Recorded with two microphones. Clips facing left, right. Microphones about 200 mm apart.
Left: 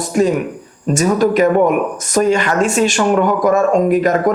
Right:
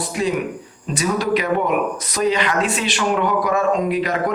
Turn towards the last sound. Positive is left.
turn(degrees=45)  # may be behind; listen again after turning